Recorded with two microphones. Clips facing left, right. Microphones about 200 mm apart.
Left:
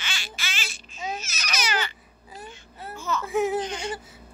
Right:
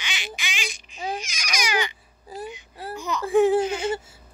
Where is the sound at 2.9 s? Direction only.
15° right (ahead or behind).